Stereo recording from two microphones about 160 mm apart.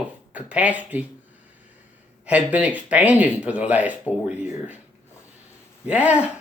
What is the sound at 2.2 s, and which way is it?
Speech, 10° right (ahead or behind).